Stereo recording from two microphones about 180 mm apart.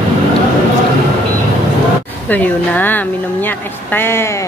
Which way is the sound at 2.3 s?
10° left (ahead or behind).